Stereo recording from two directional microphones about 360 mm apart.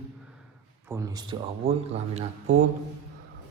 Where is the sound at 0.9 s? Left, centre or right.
Centre.